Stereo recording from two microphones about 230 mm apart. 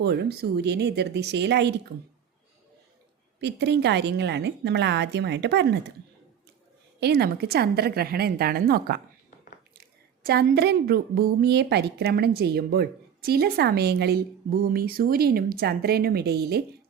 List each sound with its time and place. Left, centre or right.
0.0 s a woman's voice: right
3.4 s a woman's voice: right
7.0 s a woman's voice: right
10.2 s a woman's voice: right